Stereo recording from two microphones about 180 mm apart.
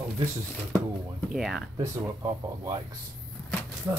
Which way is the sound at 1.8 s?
20° right (ahead or behind).